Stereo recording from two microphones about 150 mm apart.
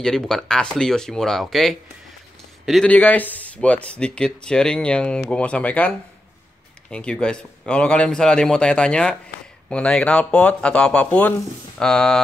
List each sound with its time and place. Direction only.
0.0 s speech: 5° left (ahead or behind)